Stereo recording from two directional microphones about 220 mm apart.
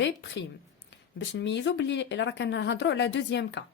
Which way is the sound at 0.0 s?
55° left (ahead or behind).